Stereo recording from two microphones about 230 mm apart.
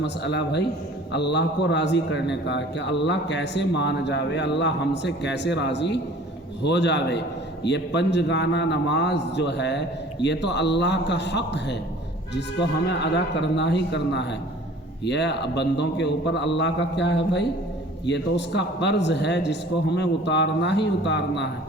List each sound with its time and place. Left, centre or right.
0.0 s a man's voice: left